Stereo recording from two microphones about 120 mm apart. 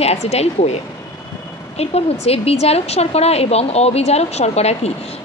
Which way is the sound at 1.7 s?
60° left (ahead or behind).